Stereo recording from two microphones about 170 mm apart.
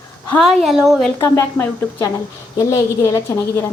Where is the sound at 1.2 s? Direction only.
15° left (ahead or behind).